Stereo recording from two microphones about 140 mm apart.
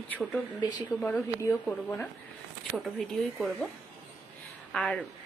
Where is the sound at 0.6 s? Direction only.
30° left (ahead or behind).